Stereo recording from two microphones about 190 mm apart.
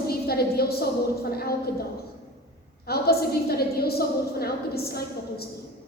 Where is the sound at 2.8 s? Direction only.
55° left (ahead or behind).